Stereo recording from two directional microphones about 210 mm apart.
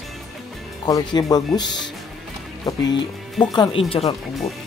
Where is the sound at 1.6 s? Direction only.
55° left (ahead or behind).